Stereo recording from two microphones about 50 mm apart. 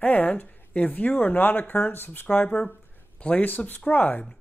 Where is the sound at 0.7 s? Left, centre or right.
Left.